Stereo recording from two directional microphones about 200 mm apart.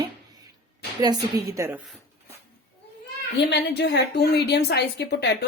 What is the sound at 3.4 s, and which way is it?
A woman's voice, 55° left (ahead or behind).